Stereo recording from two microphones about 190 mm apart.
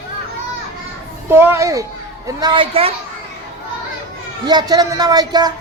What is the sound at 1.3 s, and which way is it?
A child's voice, 10° right (ahead or behind).